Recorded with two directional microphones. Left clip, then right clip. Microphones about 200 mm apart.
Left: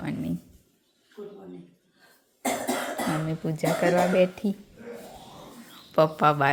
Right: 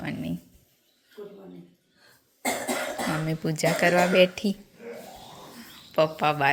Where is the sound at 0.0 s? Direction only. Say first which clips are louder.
Left 1 dB; 10° left (ahead or behind).